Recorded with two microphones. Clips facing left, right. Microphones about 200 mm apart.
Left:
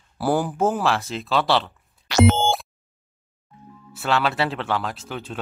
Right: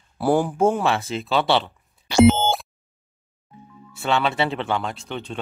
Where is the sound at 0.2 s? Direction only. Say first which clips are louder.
Right 2 dB; centre (ahead or behind).